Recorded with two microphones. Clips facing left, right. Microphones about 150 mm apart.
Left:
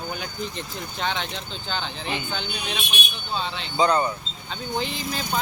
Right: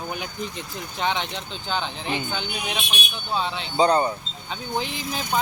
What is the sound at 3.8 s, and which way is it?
Speech, 35° right (ahead or behind).